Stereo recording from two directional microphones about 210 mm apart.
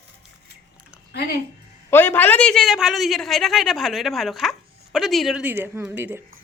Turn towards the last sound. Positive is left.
turn(degrees=-10)  # may be behind; listen again after turning